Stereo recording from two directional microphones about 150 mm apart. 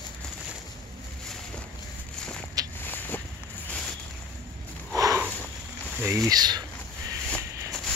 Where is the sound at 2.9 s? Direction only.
10° left (ahead or behind).